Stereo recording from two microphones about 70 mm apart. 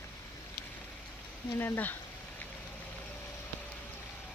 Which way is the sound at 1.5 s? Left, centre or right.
Left.